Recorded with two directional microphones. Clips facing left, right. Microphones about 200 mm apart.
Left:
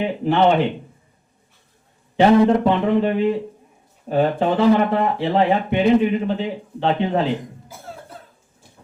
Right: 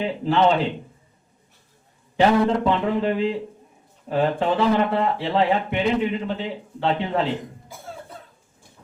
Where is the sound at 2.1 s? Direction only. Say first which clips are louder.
Left 4 dB; 20° left (ahead or behind).